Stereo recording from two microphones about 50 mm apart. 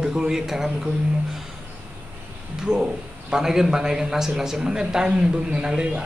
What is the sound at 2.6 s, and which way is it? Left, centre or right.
Speech, centre.